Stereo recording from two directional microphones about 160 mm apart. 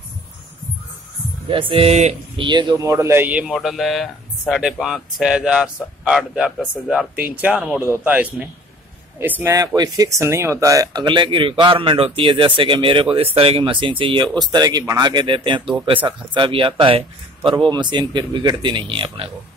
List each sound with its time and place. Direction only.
1.5 s speech: 35° right (ahead or behind)
2.4 s speech: 30° right (ahead or behind)